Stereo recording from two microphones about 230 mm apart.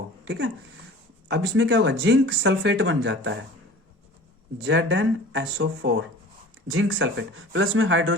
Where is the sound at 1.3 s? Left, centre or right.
Right.